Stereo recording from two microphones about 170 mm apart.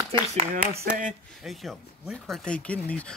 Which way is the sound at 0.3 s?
40° right (ahead or behind).